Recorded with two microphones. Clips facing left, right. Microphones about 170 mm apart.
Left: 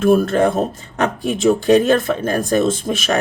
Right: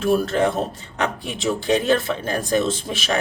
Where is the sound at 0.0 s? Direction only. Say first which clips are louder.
Left 5 dB; 50° left (ahead or behind).